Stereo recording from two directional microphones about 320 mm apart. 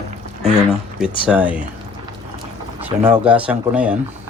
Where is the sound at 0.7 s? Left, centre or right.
Centre.